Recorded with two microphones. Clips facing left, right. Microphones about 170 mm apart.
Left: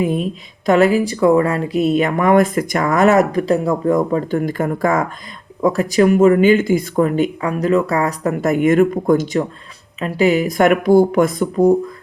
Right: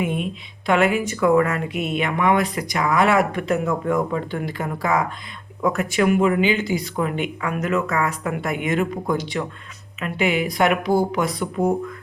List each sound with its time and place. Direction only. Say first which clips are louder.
0.0 s speech: left 6 dB; 40° left (ahead or behind)
5.6 s speech: left 6 dB; 35° left (ahead or behind)